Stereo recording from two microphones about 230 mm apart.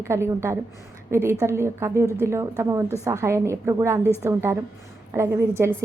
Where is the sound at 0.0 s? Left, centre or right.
Centre.